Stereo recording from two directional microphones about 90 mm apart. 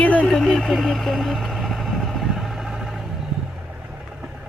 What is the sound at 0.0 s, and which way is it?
Vehicle, 15° left (ahead or behind).